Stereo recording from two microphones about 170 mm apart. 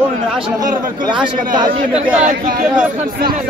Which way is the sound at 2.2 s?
55° right (ahead or behind).